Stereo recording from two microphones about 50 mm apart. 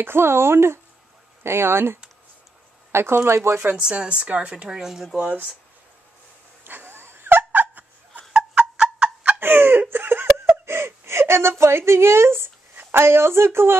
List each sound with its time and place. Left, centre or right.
0.0 s speech: right
3.9 s speech: right
4.6 s speech: centre
5.1 s speech: right
6.6 s a sound: right
7.6 s a sound: right
8.3 s turkey: centre
9.4 s a sound: right
10.4 s whimper: right